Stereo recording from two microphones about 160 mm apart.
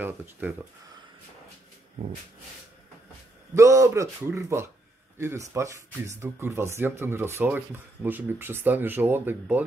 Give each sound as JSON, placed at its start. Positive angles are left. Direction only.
{"t": 0.0, "sound": "speech", "side_deg": -15}
{"t": 3.5, "sound": "a man's voice", "side_deg": -20}